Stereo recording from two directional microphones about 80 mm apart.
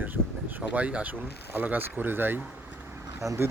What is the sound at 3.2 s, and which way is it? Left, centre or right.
Speech, right.